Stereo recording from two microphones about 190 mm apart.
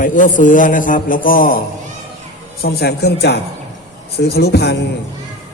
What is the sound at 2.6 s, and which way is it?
A man's voice, 55° left (ahead or behind).